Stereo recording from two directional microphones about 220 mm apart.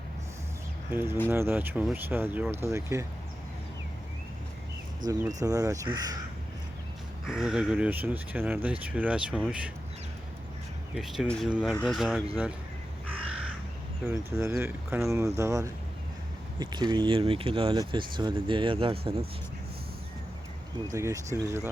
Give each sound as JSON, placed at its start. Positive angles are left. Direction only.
{"t": 0.9, "sound": "speech", "side_deg": -10}
{"t": 5.0, "sound": "speech", "side_deg": -35}
{"t": 5.4, "sound": "speech", "side_deg": -15}
{"t": 7.3, "sound": "speech", "side_deg": 0}
{"t": 10.9, "sound": "speech", "side_deg": 0}
{"t": 13.1, "sound": "crow", "side_deg": -5}
{"t": 14.0, "sound": "speech", "side_deg": -10}
{"t": 20.9, "sound": "speech", "side_deg": -15}